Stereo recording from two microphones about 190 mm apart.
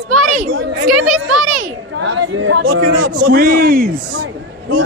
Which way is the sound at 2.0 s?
85° right.